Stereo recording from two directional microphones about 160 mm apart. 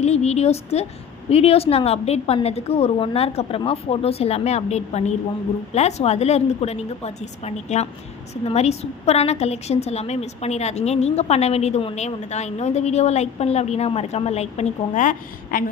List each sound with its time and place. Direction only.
0.0 s a woman's voice: 40° left (ahead or behind)